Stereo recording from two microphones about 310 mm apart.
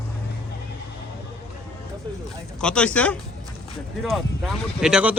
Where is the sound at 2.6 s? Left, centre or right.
Centre.